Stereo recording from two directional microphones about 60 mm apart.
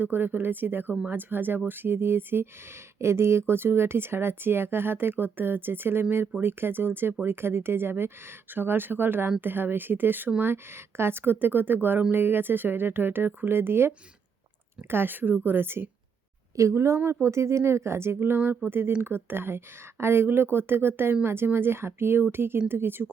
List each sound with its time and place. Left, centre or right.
0.0 s speech: right
3.0 s speech: right
16.6 s speech: right